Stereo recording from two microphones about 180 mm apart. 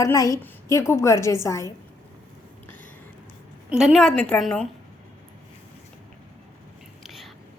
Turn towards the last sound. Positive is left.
turn(degrees=0)  # may be behind; listen again after turning